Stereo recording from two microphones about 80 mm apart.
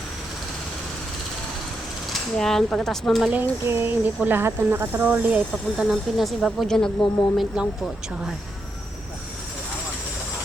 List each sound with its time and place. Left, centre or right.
2.3 s speech: centre
3.4 s speech: right
5.7 s speech: centre
7.6 s speech: centre